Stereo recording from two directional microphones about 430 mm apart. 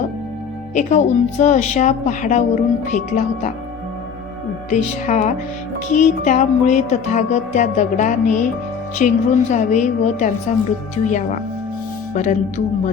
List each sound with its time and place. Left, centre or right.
0.7 s a woman's voice: centre
4.7 s a woman's voice: centre